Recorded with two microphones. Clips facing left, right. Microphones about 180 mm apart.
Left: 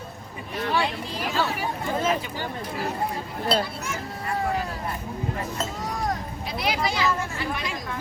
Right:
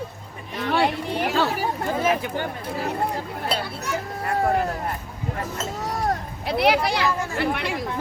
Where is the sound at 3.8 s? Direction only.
65° right (ahead or behind).